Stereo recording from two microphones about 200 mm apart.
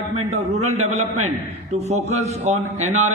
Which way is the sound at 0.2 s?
35° right (ahead or behind).